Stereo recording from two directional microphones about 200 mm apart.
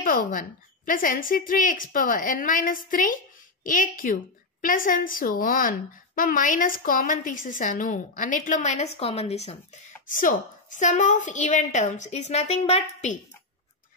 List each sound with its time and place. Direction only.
0.0 s a woman's voice: 45° left (ahead or behind)